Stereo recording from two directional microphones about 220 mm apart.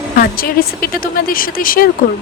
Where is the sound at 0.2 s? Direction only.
40° left (ahead or behind).